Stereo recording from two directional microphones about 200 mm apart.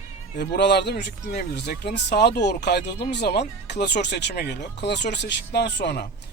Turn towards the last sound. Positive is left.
turn(degrees=55)  # may be behind; listen again after turning